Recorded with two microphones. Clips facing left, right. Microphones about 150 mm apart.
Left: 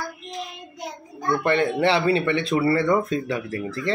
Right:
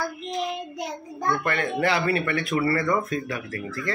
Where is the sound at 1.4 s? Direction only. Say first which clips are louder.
Left 5 dB; 25° left (ahead or behind).